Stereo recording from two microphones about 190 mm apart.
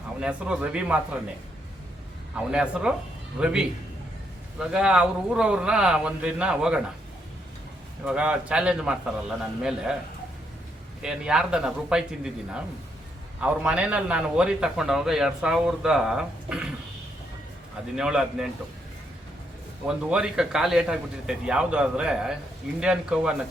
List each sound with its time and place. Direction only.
0.2 s speech: 5° right (ahead or behind)
2.3 s a man's voice: 5° right (ahead or behind)
4.6 s a man's voice: 5° right (ahead or behind)
8.0 s a man's voice: 5° right (ahead or behind)
11.0 s a man's voice: 5° right (ahead or behind)
17.9 s a man's voice: 5° right (ahead or behind)
20.1 s a man's voice: 5° right (ahead or behind)